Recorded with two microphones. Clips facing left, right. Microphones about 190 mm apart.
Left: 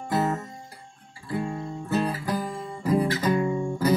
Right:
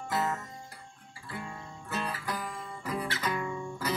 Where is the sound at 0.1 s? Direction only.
30° left (ahead or behind).